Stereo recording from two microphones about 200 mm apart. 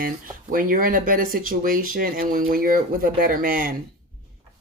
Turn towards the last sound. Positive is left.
turn(degrees=-45)  # may be behind; listen again after turning